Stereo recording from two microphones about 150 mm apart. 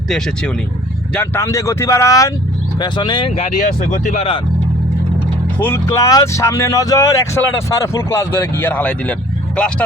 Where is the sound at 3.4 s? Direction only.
55° left (ahead or behind).